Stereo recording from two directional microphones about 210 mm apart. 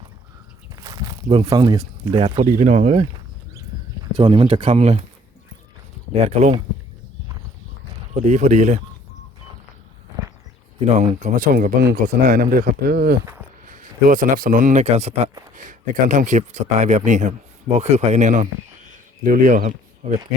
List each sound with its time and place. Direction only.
0.7 s a sound: 15° right (ahead or behind)
2.2 s speech: 35° right (ahead or behind)
4.2 s speech: 25° right (ahead or behind)
6.2 s speech: 30° right (ahead or behind)
8.2 s speech: 35° right (ahead or behind)
10.8 s speech: 35° right (ahead or behind)